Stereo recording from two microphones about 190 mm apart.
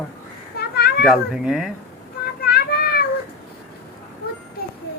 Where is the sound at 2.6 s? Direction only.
55° left (ahead or behind).